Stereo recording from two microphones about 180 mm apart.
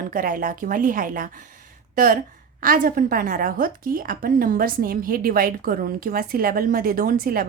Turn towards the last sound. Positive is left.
turn(degrees=-55)  # may be behind; listen again after turning